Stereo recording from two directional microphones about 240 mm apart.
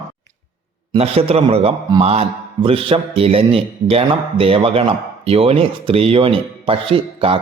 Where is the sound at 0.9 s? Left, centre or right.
Right.